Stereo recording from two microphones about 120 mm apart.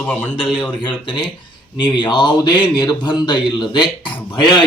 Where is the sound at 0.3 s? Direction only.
45° left (ahead or behind).